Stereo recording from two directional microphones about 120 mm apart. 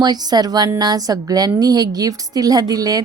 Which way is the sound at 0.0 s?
35° right (ahead or behind).